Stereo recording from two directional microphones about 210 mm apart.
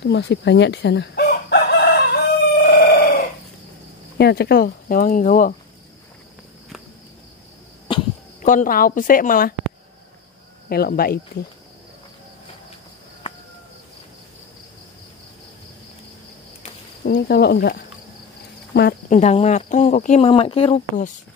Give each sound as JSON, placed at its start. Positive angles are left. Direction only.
{"t": 0.0, "sound": "chicken", "side_deg": 55}
{"t": 4.2, "sound": "speech", "side_deg": 50}
{"t": 8.4, "sound": "speech", "side_deg": 40}
{"t": 10.7, "sound": "speech", "side_deg": 45}
{"t": 17.0, "sound": "speech", "side_deg": 50}
{"t": 19.0, "sound": "speech", "side_deg": 35}